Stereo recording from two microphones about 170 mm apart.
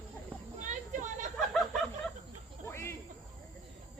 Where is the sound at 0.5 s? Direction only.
45° right (ahead or behind).